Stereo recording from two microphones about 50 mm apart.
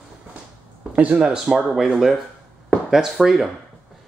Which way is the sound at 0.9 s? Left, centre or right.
Right.